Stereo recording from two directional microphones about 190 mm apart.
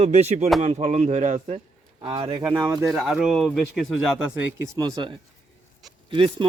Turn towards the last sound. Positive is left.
turn(degrees=-25)  # may be behind; listen again after turning